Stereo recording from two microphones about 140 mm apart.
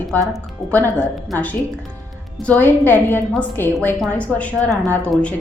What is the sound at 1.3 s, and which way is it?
A woman's voice, 10° left (ahead or behind).